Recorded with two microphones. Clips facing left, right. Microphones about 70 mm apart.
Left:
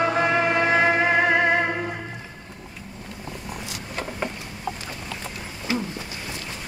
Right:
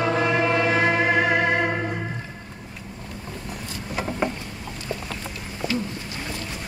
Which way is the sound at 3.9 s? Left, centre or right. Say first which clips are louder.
Right 4 dB; centre.